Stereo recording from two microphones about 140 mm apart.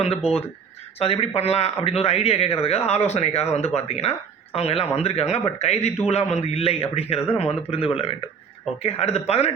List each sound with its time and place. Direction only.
0.9 s speech: 45° left (ahead or behind)